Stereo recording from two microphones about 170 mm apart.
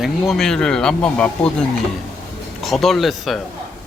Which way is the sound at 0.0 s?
Centre (ahead or behind).